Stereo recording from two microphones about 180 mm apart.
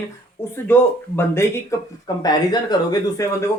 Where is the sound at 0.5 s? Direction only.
10° left (ahead or behind).